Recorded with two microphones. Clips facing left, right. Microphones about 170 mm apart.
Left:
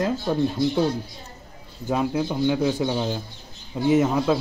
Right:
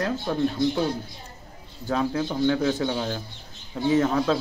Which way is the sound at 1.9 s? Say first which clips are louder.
Left 2 dB; 15° left (ahead or behind).